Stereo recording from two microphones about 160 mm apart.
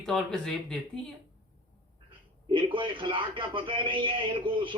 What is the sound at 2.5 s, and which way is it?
A man's voice, 30° right (ahead or behind).